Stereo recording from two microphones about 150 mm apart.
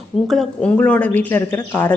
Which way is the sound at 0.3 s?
5° left (ahead or behind).